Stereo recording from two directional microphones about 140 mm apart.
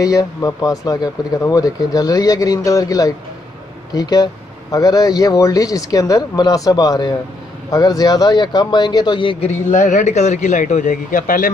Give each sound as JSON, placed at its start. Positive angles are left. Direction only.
{"t": 0.0, "sound": "speech", "side_deg": 25}
{"t": 9.7, "sound": "a man's voice", "side_deg": 60}